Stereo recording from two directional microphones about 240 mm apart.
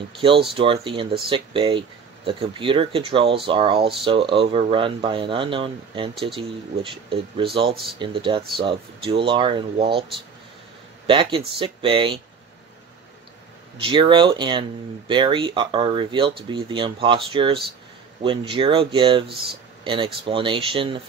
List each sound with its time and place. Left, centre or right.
0.6 s speech: right
11.1 s speech: right
13.7 s speech: right